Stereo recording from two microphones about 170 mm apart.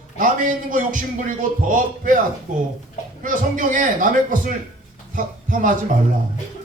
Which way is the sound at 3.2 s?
50° right (ahead or behind).